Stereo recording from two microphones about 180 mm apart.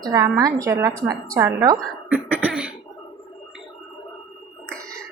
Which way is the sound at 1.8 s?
5° right (ahead or behind).